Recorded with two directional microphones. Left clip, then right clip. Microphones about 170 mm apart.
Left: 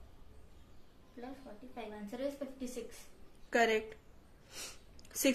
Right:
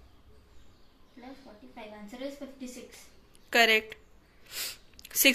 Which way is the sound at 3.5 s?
5° left (ahead or behind).